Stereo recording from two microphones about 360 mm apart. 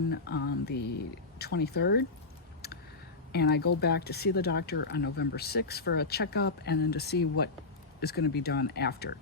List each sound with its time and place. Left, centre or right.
0.1 s speech: left
3.3 s speech: left